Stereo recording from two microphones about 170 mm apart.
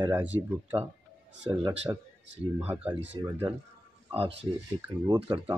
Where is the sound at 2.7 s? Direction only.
10° right (ahead or behind).